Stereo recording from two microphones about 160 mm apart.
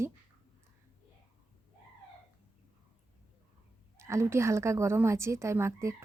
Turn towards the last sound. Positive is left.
turn(degrees=-15)  # may be behind; listen again after turning